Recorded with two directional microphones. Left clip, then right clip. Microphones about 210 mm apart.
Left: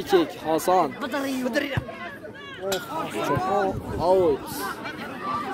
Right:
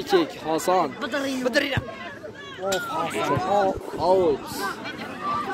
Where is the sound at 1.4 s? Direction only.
20° right (ahead or behind).